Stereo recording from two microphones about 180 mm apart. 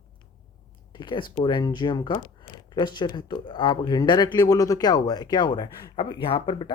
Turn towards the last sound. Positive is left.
turn(degrees=25)  # may be behind; listen again after turning